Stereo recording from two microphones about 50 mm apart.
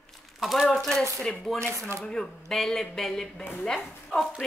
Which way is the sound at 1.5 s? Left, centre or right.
Right.